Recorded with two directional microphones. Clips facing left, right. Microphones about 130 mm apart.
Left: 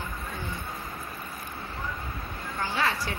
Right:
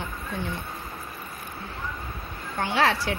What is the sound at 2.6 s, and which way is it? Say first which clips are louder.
Speech: right 5 dB; 75° right (ahead or behind).